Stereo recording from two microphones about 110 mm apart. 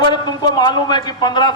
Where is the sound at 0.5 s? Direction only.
40° left (ahead or behind).